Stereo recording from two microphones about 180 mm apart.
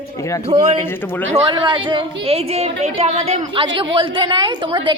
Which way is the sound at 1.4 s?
25° right (ahead or behind).